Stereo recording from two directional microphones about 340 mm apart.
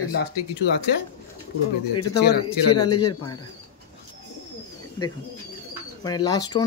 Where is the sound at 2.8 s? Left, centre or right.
Left.